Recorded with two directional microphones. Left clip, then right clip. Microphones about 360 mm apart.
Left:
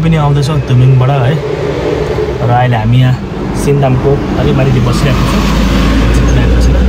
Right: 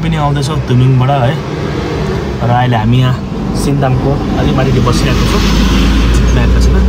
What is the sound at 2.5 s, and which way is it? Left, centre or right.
Speech, centre.